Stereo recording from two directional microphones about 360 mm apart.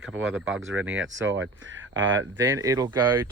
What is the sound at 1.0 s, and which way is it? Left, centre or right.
Speech, right.